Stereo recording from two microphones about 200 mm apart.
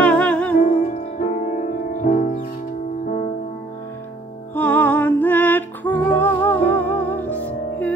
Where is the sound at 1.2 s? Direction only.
40° left (ahead or behind).